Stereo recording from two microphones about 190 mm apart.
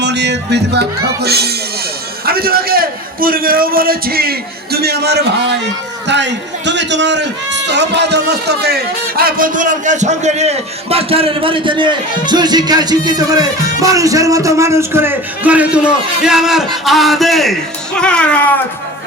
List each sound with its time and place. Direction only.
0.0 s music: 65° right (ahead or behind)
2.2 s a man's voice: 55° right (ahead or behind); by 17.5 s centre (ahead or behind)
17.9 s music: 5° left (ahead or behind)